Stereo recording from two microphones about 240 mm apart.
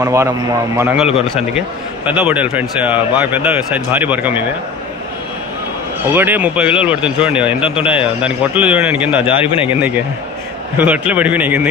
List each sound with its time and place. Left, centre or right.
0.0 s speech: centre
6.0 s speech: centre
9.4 s speech: left
9.7 s speech: centre